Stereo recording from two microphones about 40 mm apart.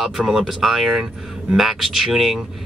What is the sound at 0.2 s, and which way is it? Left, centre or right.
Speech, centre.